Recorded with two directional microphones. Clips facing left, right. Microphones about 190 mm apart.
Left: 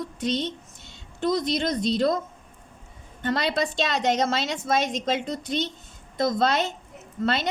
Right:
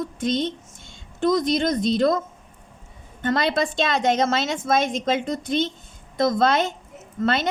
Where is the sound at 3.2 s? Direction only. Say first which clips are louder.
Right 3 dB; 50° right (ahead or behind).